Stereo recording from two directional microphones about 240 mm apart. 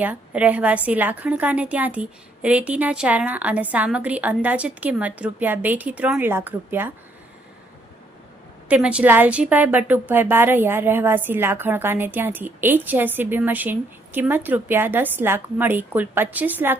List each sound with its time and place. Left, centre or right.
0.0 s a woman's voice: centre
8.7 s a woman's voice: centre